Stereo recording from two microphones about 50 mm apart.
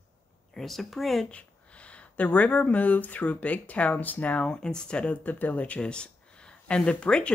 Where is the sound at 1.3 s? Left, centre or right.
Left.